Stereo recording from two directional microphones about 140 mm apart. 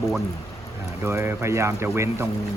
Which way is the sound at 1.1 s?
20° right (ahead or behind).